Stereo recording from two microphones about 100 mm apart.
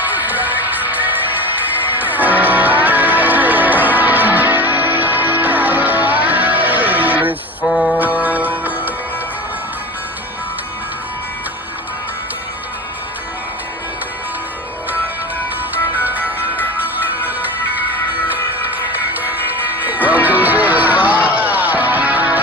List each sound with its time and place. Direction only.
0.0 s music: 15° right (ahead or behind)
15.7 s music: 15° right (ahead or behind)
16.2 s music: 20° left (ahead or behind)
16.8 s music: 15° right (ahead or behind)
18.9 s music: 15° right (ahead or behind)